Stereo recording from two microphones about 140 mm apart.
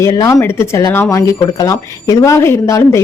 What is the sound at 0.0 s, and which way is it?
Speech, 20° left (ahead or behind).